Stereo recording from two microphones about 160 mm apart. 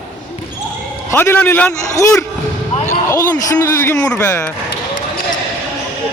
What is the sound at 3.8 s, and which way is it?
Speech, 15° left (ahead or behind).